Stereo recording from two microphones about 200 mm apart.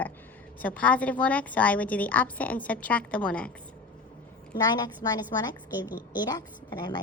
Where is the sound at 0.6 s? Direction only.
5° left (ahead or behind).